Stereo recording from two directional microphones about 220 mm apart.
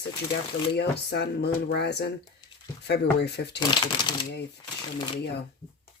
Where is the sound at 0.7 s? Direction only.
50° left (ahead or behind).